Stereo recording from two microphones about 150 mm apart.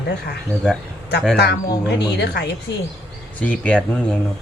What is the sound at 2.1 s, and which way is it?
Speech, 90° left.